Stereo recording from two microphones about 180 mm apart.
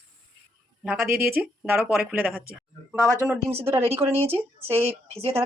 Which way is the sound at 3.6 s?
15° right (ahead or behind).